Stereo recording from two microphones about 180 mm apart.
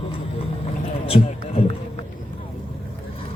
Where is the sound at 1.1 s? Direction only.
30° left (ahead or behind).